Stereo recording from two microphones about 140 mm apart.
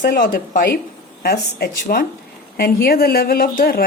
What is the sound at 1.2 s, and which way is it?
A woman's voice, 90° left.